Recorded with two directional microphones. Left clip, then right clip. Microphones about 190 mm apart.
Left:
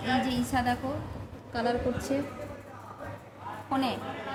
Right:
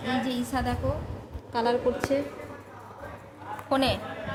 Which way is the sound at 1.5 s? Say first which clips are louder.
Right 3 dB; 40° right (ahead or behind).